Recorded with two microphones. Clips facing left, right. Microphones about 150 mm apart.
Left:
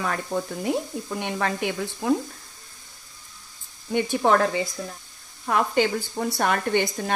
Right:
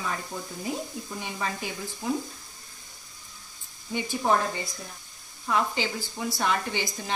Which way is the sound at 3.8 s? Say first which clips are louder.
Left 5 dB; 60° left (ahead or behind).